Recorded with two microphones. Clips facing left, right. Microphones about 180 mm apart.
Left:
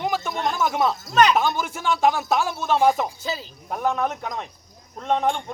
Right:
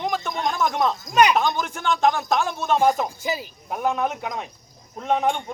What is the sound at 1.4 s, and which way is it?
Speech, 5° left (ahead or behind).